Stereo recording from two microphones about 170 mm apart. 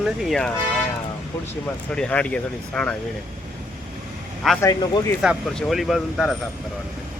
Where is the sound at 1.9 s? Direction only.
5° left (ahead or behind).